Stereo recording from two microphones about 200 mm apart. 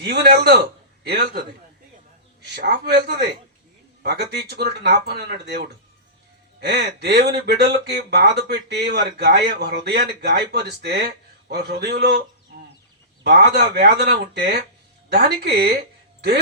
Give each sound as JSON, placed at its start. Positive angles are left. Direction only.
{"t": 0.0, "sound": "a man's voice", "side_deg": -55}
{"t": 2.5, "sound": "speech", "side_deg": -55}
{"t": 13.2, "sound": "speech", "side_deg": -60}